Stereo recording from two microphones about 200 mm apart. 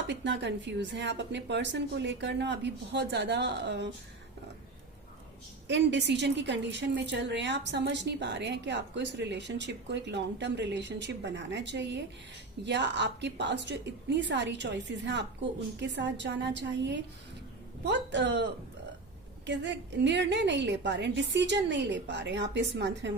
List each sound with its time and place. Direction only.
0.1 s a woman's voice: 60° right (ahead or behind)
5.6 s a woman's voice: 60° right (ahead or behind)
19.5 s a woman's voice: 60° right (ahead or behind)